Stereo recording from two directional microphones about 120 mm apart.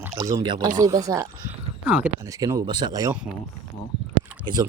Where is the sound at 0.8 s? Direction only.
30° right (ahead or behind).